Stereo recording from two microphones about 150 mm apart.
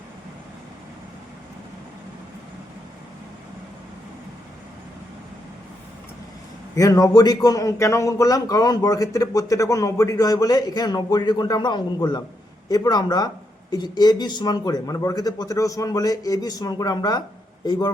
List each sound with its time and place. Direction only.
6.7 s a man's voice: 25° left (ahead or behind)